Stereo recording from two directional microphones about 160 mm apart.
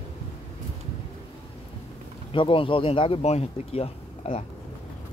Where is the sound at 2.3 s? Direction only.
30° left (ahead or behind).